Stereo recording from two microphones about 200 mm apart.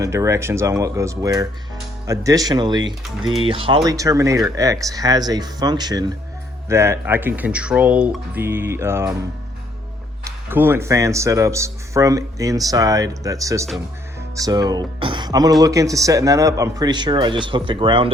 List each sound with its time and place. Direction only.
0.0 s speech: 15° right (ahead or behind)
10.2 s speech: 10° right (ahead or behind)